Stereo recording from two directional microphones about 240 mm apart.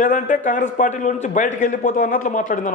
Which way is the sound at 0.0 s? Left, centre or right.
Left.